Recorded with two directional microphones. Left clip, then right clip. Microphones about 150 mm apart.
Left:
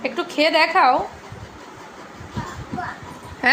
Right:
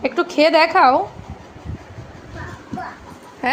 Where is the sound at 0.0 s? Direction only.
75° right (ahead or behind).